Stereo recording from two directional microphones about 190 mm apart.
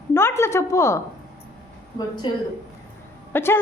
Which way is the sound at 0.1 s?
15° left (ahead or behind).